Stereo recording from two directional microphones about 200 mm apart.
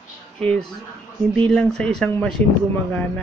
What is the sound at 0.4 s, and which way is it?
A man's voice, 5° left (ahead or behind).